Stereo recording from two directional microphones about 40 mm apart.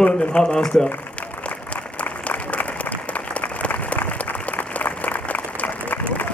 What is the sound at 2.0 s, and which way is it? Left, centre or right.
Applause, left.